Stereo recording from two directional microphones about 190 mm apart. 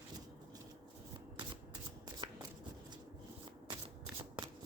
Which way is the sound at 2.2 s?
25° right (ahead or behind).